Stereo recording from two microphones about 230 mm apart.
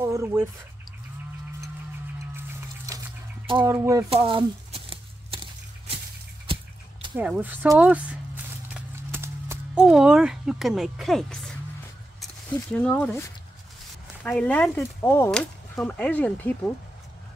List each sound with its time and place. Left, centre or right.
0.0 s speech: centre
3.4 s speech: right
4.2 s a sound: right
7.2 s speech: centre
8.6 s a sound: centre
12.7 s speech: centre
14.2 s speech: centre